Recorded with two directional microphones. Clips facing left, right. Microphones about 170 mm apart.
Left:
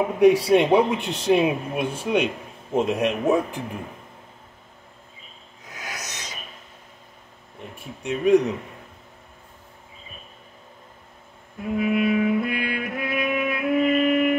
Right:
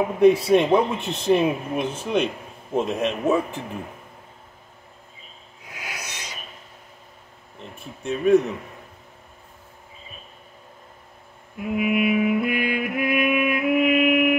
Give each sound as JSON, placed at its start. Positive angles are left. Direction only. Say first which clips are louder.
{"t": 0.2, "sound": "a man's voice", "louder": "even", "side_deg": 10}
{"t": 5.8, "sound": "a sound", "louder": "even", "side_deg": -10}
{"t": 7.8, "sound": "a man's voice", "louder": "even", "side_deg": 15}
{"t": 11.7, "sound": "music", "louder": "even", "side_deg": -10}